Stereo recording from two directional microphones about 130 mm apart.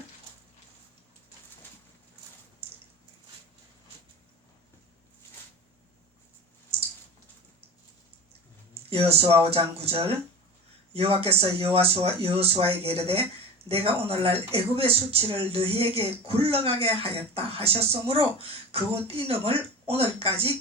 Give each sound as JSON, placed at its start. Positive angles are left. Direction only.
{"t": 8.9, "sound": "speech", "side_deg": -45}